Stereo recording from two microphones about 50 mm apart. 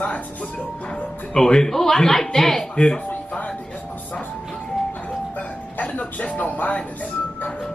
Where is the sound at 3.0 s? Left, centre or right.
Left.